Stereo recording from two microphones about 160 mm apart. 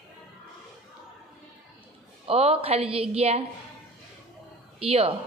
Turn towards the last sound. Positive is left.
turn(degrees=-35)  # may be behind; listen again after turning